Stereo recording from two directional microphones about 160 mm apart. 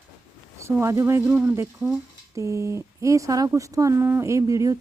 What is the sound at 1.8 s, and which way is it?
Speech, 5° right (ahead or behind).